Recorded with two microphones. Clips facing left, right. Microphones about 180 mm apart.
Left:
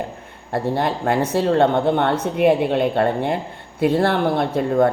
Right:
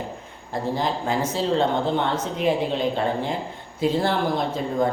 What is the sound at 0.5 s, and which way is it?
Speech, 65° left (ahead or behind).